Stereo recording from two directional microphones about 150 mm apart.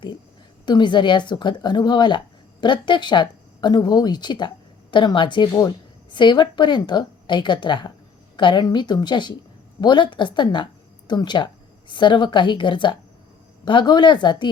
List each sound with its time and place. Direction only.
0.6 s a woman's voice: 30° left (ahead or behind)